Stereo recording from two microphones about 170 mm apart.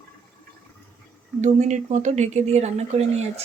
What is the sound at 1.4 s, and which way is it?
Speech, 45° right (ahead or behind).